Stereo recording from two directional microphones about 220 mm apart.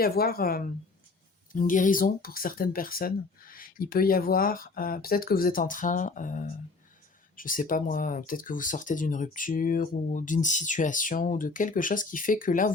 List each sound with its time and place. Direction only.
0.0 s a woman's voice: 45° left (ahead or behind)